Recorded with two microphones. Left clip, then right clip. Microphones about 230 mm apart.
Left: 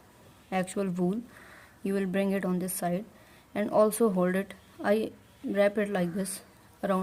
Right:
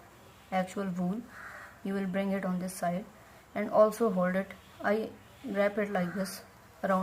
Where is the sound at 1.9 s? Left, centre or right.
Left.